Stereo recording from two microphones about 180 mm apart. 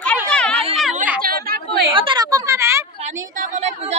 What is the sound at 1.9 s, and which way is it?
Speech, 25° right (ahead or behind).